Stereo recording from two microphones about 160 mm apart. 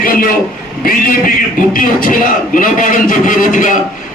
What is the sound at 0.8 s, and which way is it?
A man's voice, 65° left (ahead or behind).